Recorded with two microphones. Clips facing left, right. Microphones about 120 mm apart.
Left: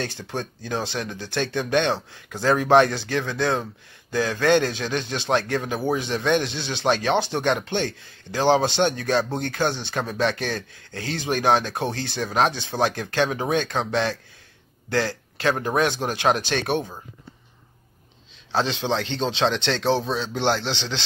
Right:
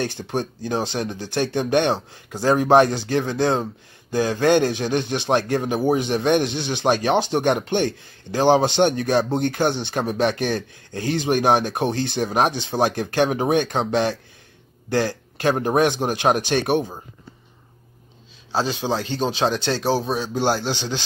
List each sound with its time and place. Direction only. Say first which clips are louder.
0.0 s speech: right 5 dB; 15° right (ahead or behind)
2.4 s speech: right 2 dB; 35° right (ahead or behind)
3.2 s speech: right 3 dB; 20° right (ahead or behind)
15.6 s speech: right 5 dB; 45° right (ahead or behind)
15.9 s speech: right 2 dB; 15° right (ahead or behind)
18.5 s speech: right 1 dB; 5° right (ahead or behind)